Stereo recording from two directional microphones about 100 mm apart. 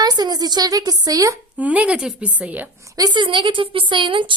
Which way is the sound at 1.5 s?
15° right (ahead or behind).